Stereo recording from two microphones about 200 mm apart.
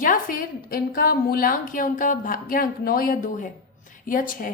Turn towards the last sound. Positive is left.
turn(degrees=45)  # may be behind; listen again after turning